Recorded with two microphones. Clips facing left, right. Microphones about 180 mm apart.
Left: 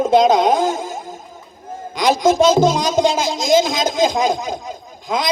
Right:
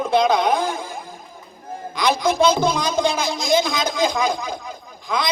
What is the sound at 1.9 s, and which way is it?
Speech, 45° left (ahead or behind).